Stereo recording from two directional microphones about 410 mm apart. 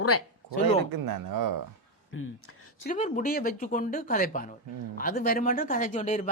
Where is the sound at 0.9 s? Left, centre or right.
Right.